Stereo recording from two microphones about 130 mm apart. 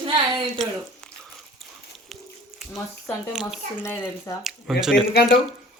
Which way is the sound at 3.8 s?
20° left (ahead or behind).